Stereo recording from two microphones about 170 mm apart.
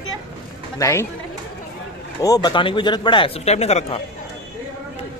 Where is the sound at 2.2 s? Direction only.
20° left (ahead or behind); by 4.0 s 40° left (ahead or behind).